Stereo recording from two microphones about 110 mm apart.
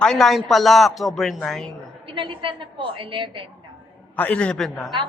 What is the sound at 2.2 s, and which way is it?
A woman's voice, 50° right (ahead or behind).